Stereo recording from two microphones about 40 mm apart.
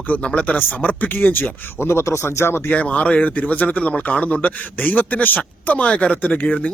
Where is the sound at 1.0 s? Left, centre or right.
Left.